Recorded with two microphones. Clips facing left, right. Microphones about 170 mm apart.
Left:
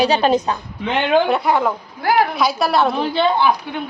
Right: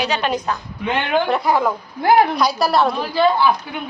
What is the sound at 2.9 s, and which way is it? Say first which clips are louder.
Speech: even; 25° left (ahead or behind).